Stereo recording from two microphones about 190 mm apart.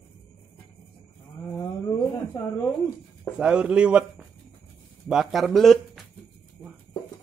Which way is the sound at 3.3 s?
5° right (ahead or behind).